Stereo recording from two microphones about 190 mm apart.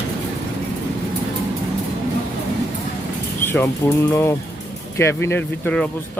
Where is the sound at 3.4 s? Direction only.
10° left (ahead or behind).